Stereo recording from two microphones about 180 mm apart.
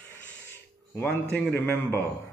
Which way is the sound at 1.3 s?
10° left (ahead or behind).